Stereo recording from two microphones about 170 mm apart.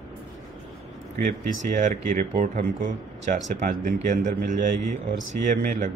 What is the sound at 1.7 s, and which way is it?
A man's voice, 50° right (ahead or behind).